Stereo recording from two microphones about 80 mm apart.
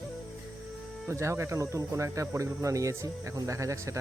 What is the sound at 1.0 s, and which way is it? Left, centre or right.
Speech, right.